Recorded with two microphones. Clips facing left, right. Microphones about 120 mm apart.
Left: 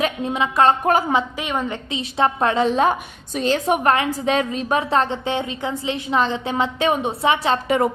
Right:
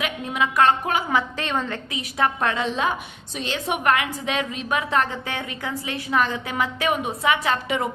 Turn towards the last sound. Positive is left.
turn(degrees=45)  # may be behind; listen again after turning